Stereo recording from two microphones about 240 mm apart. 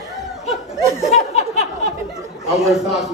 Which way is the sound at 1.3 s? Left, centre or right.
Left.